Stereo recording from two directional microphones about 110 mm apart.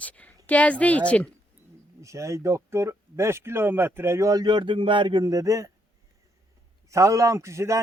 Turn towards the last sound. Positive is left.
turn(degrees=-25)  # may be behind; listen again after turning